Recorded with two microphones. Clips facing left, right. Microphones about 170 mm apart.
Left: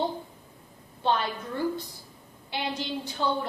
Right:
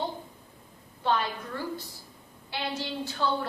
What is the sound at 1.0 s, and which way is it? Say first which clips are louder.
Speech: left 1 dB; 25° left (ahead or behind).